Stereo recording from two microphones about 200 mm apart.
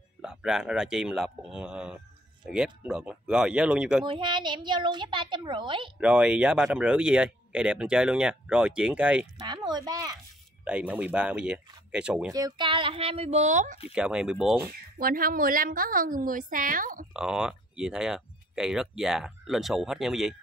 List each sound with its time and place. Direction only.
0.2 s speech: 5° right (ahead or behind)
4.0 s a child's voice: 25° right (ahead or behind)
5.9 s speech: 5° right (ahead or behind)
9.5 s a child's voice: 20° right (ahead or behind)
10.6 s speech: 5° right (ahead or behind)
12.3 s a child's voice: 20° right (ahead or behind); by 13.7 s 35° right (ahead or behind)
13.9 s speech: 5° right (ahead or behind)
15.0 s a woman's voice: 45° right (ahead or behind)
17.1 s speech: 5° right (ahead or behind)